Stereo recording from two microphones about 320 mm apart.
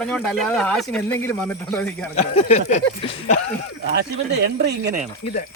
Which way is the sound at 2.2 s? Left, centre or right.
Centre.